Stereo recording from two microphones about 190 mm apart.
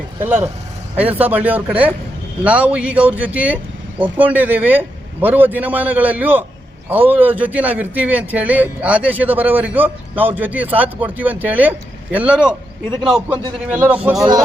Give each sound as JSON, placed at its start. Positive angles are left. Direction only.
{"t": 0.2, "sound": "a man's voice", "side_deg": -10}
{"t": 14.2, "sound": "speech", "side_deg": -20}